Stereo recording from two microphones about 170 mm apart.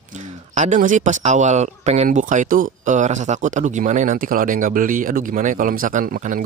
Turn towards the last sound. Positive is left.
turn(degrees=-55)  # may be behind; listen again after turning